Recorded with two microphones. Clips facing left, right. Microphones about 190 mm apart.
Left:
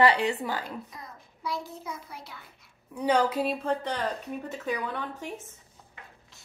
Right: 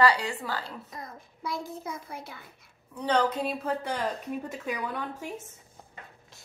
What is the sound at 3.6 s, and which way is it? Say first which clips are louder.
A woman's voice: left 1 dB; 10° right (ahead or behind).